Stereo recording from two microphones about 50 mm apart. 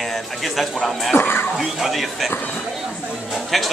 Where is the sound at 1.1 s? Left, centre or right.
Left.